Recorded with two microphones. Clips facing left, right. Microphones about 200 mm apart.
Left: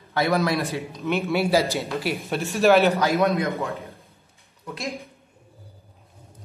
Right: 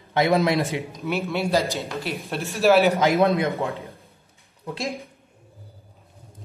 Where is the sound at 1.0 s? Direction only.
Centre (ahead or behind).